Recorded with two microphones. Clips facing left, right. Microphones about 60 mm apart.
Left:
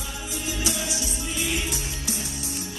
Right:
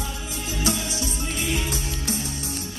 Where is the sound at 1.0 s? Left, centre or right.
Right.